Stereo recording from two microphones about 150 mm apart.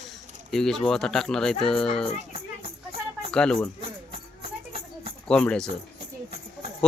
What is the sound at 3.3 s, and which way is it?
Speech, 5° left (ahead or behind).